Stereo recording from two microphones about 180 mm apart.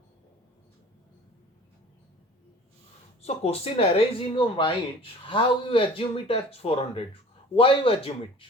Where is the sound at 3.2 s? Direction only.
35° left (ahead or behind).